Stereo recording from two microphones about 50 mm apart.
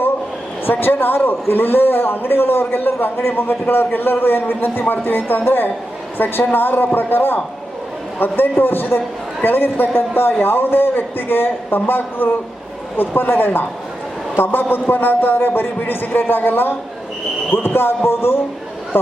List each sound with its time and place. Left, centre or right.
0.6 s a man's voice: left